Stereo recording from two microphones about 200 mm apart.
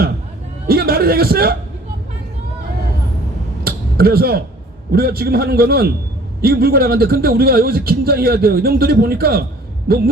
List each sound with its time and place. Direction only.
0.7 s a man's voice: 50° right (ahead or behind)
3.6 s a sound: 50° right (ahead or behind)
4.9 s a man's voice: 50° right (ahead or behind)